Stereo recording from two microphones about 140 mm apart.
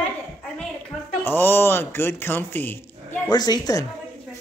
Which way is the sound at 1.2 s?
15° left (ahead or behind).